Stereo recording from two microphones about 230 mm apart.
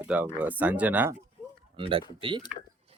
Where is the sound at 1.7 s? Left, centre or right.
Right.